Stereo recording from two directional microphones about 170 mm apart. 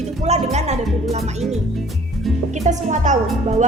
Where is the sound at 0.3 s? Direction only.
40° right (ahead or behind).